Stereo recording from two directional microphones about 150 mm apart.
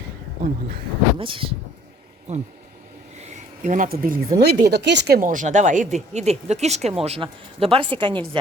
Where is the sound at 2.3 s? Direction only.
50° right (ahead or behind).